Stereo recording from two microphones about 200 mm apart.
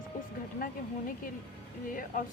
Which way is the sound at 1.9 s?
40° left (ahead or behind).